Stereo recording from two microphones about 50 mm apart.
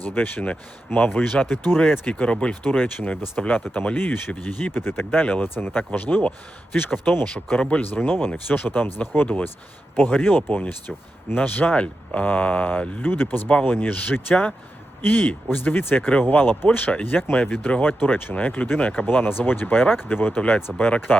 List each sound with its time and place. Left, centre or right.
0.0 s speech: left
2.8 s speech: left
5.1 s speech: left
7.3 s speech: left
13.0 s speech: left
19.0 s speech: left